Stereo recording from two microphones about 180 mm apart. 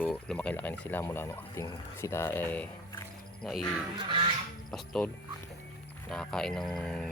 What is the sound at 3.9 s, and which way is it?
Goose, 25° right (ahead or behind).